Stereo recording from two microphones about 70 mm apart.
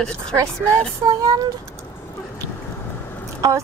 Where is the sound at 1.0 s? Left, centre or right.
Right.